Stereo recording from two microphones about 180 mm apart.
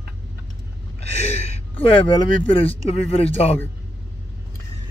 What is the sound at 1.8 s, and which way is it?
Speech, 30° left (ahead or behind).